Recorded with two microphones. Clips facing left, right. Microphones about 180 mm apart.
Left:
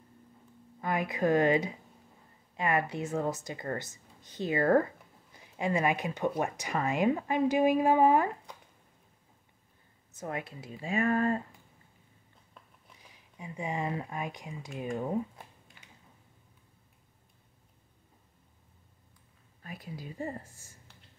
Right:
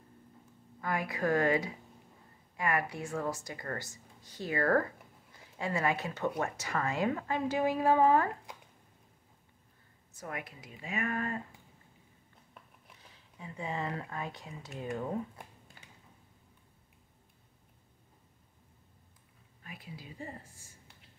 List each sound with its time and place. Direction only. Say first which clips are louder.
0.7 s speech: left 3 dB; 20° left (ahead or behind)
10.1 s speech: left 5 dB; 25° left (ahead or behind)
13.0 s speech: left 3 dB; 15° left (ahead or behind)
19.6 s a woman's voice: left 5 dB; 40° left (ahead or behind)